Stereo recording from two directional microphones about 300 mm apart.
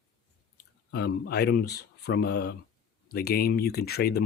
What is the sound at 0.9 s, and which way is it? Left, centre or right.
Speech, left.